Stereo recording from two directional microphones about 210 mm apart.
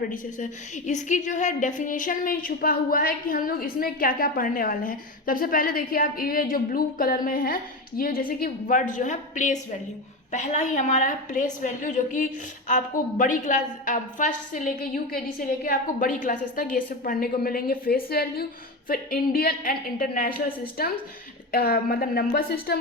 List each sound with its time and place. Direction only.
0.9 s a woman's voice: 35° left (ahead or behind)